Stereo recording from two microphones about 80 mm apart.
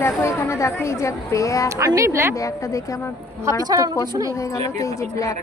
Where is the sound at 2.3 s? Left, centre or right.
Left.